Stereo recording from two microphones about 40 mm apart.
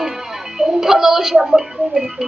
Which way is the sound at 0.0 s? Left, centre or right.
Centre.